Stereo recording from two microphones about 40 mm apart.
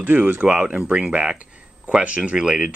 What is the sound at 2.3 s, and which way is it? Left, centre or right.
Speech, centre.